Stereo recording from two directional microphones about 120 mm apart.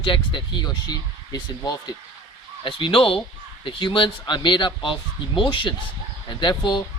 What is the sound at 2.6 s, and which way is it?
Speech, 45° left (ahead or behind).